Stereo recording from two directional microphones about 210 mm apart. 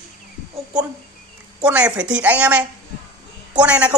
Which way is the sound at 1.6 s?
5° right (ahead or behind).